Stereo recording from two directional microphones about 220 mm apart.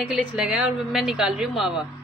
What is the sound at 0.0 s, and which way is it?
Speech, 5° right (ahead or behind).